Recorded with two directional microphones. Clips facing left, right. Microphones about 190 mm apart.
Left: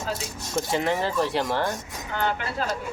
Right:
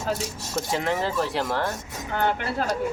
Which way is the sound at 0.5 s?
Centre (ahead or behind).